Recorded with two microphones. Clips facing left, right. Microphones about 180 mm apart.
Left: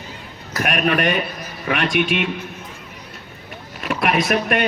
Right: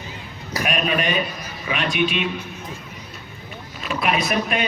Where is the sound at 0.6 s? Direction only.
60° left (ahead or behind).